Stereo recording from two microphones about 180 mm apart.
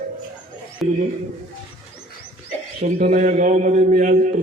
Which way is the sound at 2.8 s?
45° right (ahead or behind).